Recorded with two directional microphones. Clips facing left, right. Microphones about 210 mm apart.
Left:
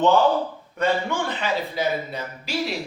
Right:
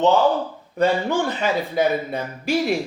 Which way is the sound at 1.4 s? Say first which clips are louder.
Right 5 dB; 50° right (ahead or behind).